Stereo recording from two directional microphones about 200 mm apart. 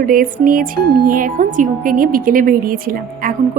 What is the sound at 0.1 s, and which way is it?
Speech, 45° right (ahead or behind).